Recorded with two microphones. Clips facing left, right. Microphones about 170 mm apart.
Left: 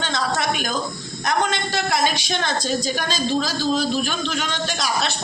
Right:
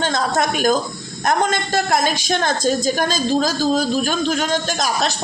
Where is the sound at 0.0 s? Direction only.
45° right (ahead or behind).